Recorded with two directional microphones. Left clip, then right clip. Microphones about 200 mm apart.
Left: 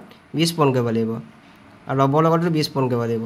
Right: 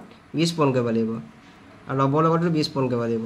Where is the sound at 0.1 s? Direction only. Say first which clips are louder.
Left 2 dB; 35° left (ahead or behind).